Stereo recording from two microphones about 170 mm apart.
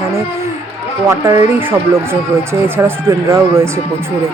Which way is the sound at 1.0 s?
20° right (ahead or behind).